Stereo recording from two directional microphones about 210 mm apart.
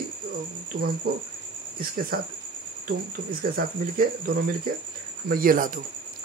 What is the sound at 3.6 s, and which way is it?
Speech, 45° right (ahead or behind).